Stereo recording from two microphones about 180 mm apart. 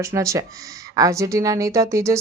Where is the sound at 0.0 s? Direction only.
15° right (ahead or behind).